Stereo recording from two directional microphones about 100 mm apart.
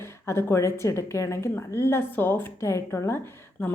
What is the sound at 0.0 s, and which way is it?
A woman's voice, 25° left (ahead or behind).